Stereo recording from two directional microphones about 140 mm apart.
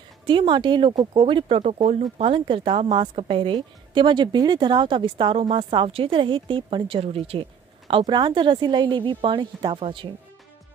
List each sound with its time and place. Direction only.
0.3 s speech: 35° right (ahead or behind)
7.9 s speech: 30° right (ahead or behind)